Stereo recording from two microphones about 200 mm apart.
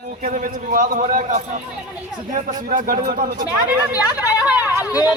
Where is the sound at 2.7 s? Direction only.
40° right (ahead or behind).